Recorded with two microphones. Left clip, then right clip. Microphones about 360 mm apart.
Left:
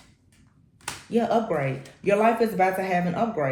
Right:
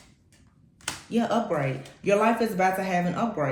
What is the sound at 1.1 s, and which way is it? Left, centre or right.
A woman's voice, centre.